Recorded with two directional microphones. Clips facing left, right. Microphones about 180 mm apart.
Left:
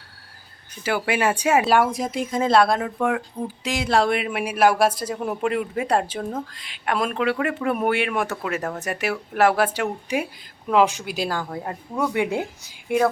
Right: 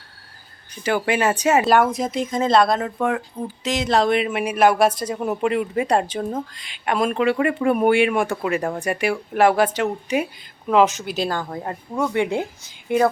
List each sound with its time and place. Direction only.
0.8 s speech: 5° left (ahead or behind)